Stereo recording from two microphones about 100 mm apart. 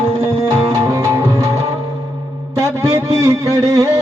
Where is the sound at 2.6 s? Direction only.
30° right (ahead or behind).